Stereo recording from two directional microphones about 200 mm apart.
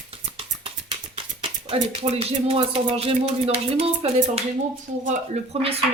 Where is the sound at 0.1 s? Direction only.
30° right (ahead or behind).